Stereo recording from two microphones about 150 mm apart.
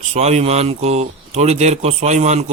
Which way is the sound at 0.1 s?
45° right (ahead or behind).